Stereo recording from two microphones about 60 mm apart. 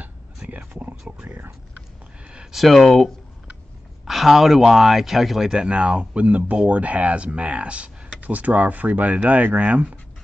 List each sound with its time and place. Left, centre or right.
0.5 s speech: right
2.5 s speech: centre
4.0 s speech: centre
5.5 s speech: centre